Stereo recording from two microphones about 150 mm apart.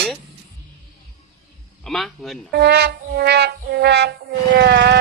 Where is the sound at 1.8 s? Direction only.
5° left (ahead or behind).